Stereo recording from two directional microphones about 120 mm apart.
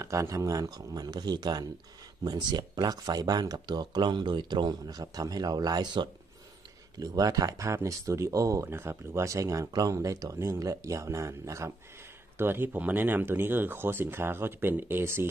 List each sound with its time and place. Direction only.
0.0 s speech: 25° right (ahead or behind)